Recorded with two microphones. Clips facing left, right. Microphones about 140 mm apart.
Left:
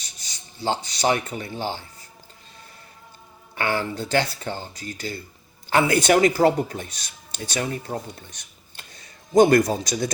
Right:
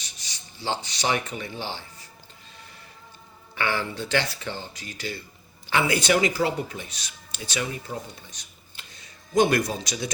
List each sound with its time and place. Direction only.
0.6 s speech: 45° left (ahead or behind)
3.5 s speech: 45° left (ahead or behind)
8.3 s a sound: 60° left (ahead or behind)
9.3 s speech: 40° left (ahead or behind)